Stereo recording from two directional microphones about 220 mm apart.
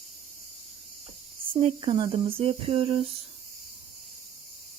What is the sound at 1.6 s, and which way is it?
Speech, 25° right (ahead or behind).